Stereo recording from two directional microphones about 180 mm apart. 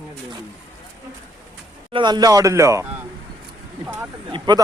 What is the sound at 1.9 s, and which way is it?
Speech, 25° right (ahead or behind).